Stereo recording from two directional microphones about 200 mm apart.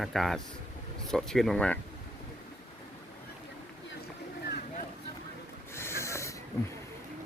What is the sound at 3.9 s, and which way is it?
Boat, 55° left (ahead or behind).